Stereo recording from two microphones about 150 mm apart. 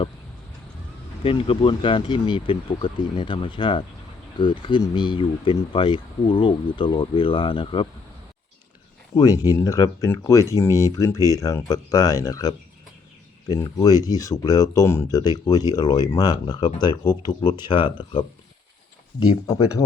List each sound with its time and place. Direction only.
1.2 s speech: 35° left (ahead or behind)
9.1 s speech: 25° left (ahead or behind)